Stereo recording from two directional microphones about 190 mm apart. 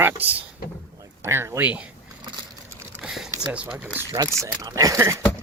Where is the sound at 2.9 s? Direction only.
5° right (ahead or behind).